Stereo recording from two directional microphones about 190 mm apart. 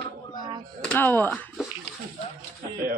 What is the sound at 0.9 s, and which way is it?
Speech, 10° left (ahead or behind).